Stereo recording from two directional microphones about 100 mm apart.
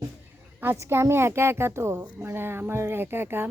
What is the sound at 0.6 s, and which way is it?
A woman's voice, 25° right (ahead or behind).